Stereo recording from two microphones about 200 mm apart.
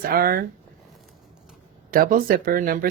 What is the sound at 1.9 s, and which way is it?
Speech, 45° right (ahead or behind).